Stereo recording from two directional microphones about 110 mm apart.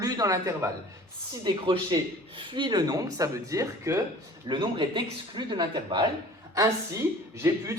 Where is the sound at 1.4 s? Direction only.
45° right (ahead or behind); by 4.0 s 25° right (ahead or behind).